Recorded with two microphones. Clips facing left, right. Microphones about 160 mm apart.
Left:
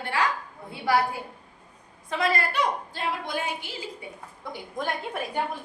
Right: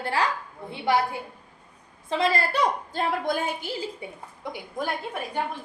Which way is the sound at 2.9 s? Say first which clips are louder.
Right 5 dB; 45° right (ahead or behind).